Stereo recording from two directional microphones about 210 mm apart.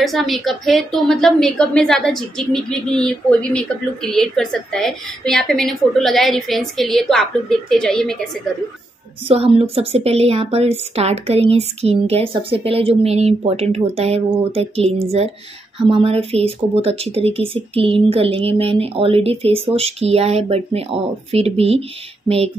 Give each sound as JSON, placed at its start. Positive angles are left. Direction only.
{"t": 0.0, "sound": "a woman's voice", "side_deg": 0}
{"t": 9.3, "sound": "a woman's voice", "side_deg": -30}